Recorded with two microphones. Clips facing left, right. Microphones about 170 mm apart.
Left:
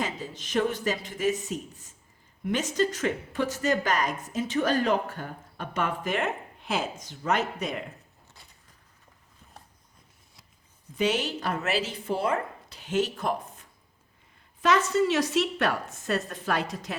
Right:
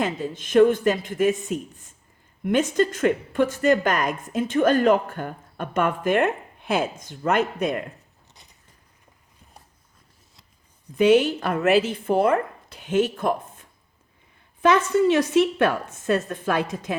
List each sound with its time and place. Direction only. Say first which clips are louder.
0.0 s a woman's voice: right 7 dB; 55° right (ahead or behind)
10.9 s a woman's voice: right 10 dB; 55° right (ahead or behind)
14.6 s a woman's voice: right 5 dB; 55° right (ahead or behind)